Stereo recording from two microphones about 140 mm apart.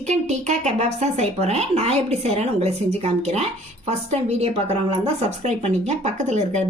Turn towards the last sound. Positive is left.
turn(degrees=-55)  # may be behind; listen again after turning